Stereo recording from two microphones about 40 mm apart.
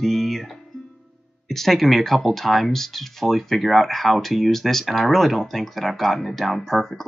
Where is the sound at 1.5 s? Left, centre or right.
Centre.